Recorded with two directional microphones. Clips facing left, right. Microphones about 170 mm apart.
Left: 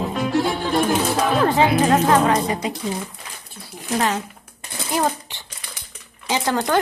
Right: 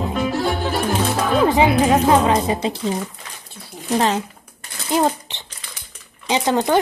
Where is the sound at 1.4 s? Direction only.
15° right (ahead or behind).